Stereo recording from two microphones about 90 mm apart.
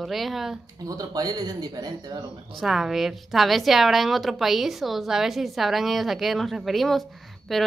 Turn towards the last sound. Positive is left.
turn(degrees=0)  # may be behind; listen again after turning